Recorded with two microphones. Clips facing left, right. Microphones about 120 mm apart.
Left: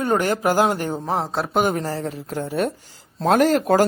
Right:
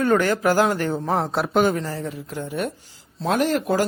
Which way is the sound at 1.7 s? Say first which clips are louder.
Left 2 dB; 35° left (ahead or behind).